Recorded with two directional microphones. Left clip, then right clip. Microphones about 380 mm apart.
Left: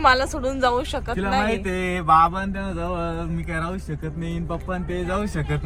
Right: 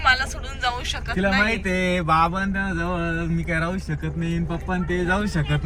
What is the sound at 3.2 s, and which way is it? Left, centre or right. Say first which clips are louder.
Speech: right 3 dB; centre.